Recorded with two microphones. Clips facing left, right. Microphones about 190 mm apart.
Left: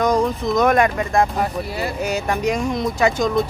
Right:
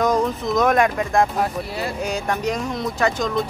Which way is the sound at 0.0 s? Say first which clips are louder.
Left 1 dB; centre (ahead or behind).